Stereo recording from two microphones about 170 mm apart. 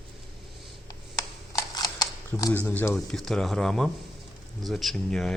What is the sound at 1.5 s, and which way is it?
Camera, 20° left (ahead or behind).